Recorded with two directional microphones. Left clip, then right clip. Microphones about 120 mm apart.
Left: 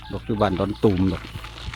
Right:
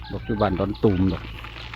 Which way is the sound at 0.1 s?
35° left (ahead or behind).